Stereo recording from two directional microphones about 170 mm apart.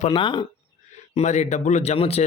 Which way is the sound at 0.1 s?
30° left (ahead or behind).